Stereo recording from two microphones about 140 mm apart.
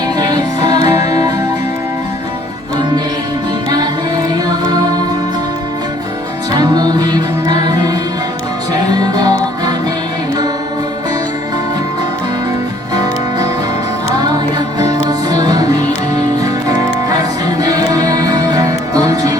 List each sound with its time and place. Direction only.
0.2 s music: 30° right (ahead or behind)
6.5 s music: 30° right (ahead or behind)
12.9 s music: 30° right (ahead or behind)